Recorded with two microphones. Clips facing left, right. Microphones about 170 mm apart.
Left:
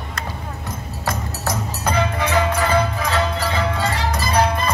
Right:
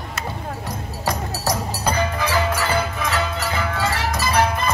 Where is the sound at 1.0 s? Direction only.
15° right (ahead or behind).